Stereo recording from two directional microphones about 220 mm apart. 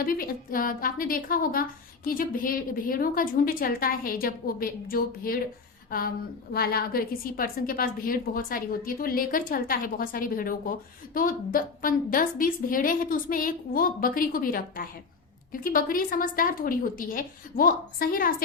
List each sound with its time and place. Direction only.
0.0 s a woman's voice: 40° left (ahead or behind)